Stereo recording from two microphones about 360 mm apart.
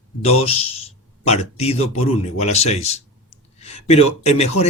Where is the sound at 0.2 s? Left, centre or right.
Centre.